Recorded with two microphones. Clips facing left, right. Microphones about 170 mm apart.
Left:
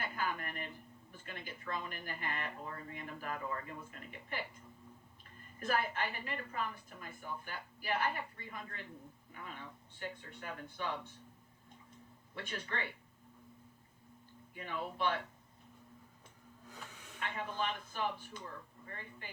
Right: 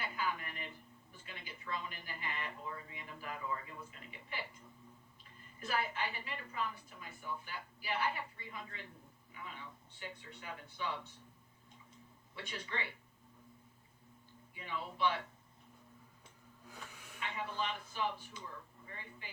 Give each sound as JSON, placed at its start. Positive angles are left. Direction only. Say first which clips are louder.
{"t": 0.0, "sound": "a sound", "louder": "left 1 dB", "side_deg": 50}
{"t": 1.1, "sound": "a woman's voice", "louder": "left 4 dB", "side_deg": 50}
{"t": 5.5, "sound": "a woman's voice", "louder": "left 3 dB", "side_deg": 50}
{"t": 12.3, "sound": "a woman's voice", "louder": "left 2 dB", "side_deg": 50}
{"t": 14.5, "sound": "a woman's voice", "louder": "left 2 dB", "side_deg": 50}
{"t": 17.2, "sound": "a woman's voice", "louder": "left 1 dB", "side_deg": 50}